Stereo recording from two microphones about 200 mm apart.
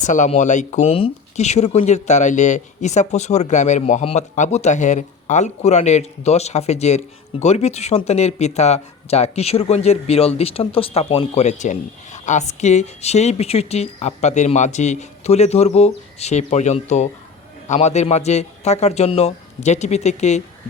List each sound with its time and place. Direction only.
0.0 s speech: 40° left (ahead or behind)